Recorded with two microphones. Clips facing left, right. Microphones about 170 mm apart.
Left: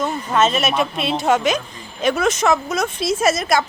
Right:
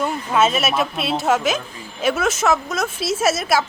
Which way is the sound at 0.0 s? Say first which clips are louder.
Even; 10° right (ahead or behind).